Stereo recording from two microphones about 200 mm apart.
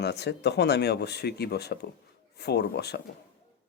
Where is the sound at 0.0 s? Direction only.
55° left (ahead or behind).